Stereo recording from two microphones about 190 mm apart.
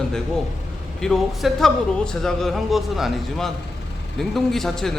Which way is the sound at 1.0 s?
Centre (ahead or behind).